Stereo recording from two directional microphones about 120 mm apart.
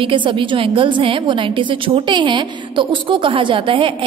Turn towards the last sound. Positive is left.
turn(degrees=-45)  # may be behind; listen again after turning